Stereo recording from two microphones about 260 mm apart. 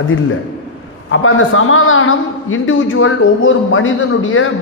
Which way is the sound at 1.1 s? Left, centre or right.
Left.